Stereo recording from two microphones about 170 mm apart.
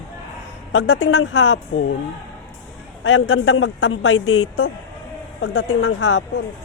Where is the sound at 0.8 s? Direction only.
90° left.